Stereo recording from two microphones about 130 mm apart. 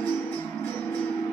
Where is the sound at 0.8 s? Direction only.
15° left (ahead or behind).